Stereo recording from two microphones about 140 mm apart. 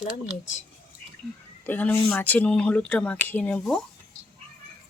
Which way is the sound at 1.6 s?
10° left (ahead or behind).